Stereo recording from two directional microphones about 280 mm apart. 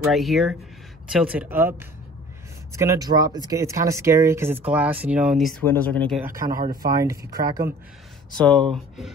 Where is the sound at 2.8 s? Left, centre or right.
Centre.